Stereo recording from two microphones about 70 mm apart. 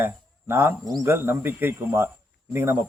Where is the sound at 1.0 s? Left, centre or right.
Right.